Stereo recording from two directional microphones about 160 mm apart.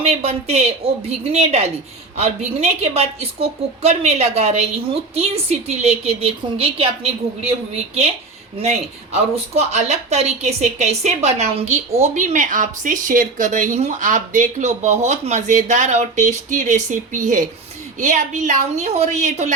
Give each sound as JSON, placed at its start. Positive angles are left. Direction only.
{"t": 0.0, "sound": "a woman's voice", "side_deg": -40}
{"t": 8.5, "sound": "speech", "side_deg": -40}